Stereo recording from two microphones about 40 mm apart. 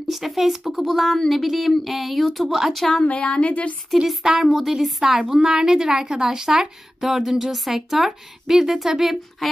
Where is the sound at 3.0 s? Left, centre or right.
Left.